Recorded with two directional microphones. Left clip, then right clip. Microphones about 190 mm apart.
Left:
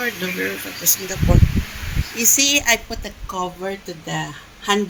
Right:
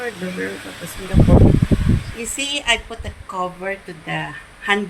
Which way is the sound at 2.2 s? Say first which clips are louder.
Left 9 dB; 30° left (ahead or behind).